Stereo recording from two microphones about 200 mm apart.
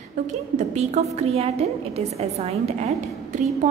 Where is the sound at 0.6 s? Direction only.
35° right (ahead or behind).